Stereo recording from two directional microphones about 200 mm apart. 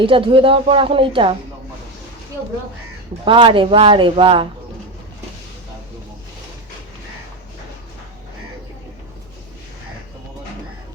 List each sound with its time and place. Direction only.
0.0 s a woman's voice: 25° right (ahead or behind)
3.2 s a woman's voice: 25° right (ahead or behind)